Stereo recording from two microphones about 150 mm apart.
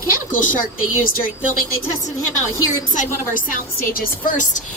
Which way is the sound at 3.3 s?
70° left (ahead or behind).